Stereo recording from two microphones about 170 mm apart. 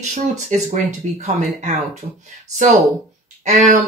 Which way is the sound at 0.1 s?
40° right (ahead or behind).